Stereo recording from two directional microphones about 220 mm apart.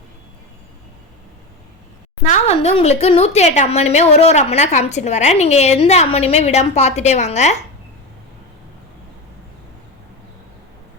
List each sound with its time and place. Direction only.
2.3 s a woman's voice: 30° left (ahead or behind)